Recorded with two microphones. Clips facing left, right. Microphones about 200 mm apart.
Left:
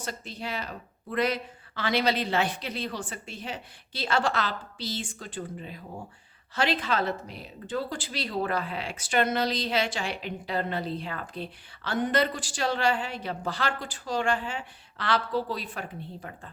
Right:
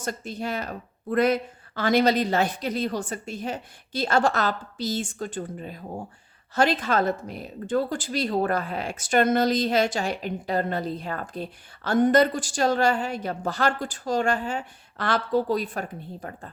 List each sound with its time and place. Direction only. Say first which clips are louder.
0.0 s speech: right 6 dB; 45° right (ahead or behind)